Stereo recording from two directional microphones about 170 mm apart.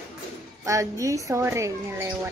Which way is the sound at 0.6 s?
20° right (ahead or behind).